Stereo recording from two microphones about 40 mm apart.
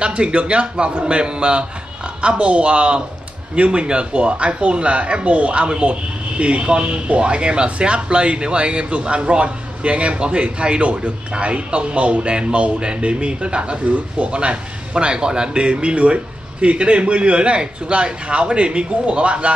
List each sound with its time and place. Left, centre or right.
0.0 s speech: right